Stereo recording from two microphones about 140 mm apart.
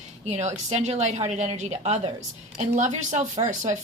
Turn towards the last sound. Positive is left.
turn(degrees=-60)  # may be behind; listen again after turning